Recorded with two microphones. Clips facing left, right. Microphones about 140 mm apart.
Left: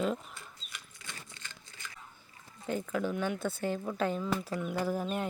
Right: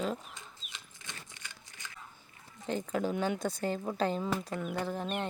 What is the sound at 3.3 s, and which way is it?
Speech, 40° right (ahead or behind).